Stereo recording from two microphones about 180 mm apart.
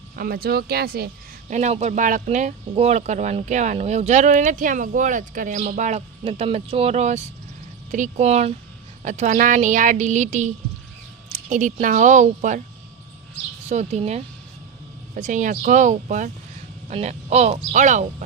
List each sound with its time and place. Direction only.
0.2 s speech: 55° right (ahead or behind)
1.5 s speech: 40° right (ahead or behind)
13.7 s speech: 40° right (ahead or behind)